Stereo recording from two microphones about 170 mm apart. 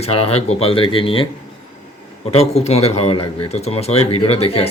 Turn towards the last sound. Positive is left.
turn(degrees=35)  # may be behind; listen again after turning